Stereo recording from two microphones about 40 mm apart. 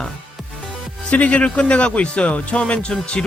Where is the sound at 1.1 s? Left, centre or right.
Left.